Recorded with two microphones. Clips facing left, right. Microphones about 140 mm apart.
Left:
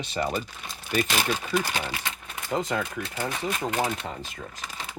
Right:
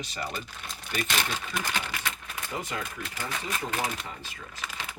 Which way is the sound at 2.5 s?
90° left.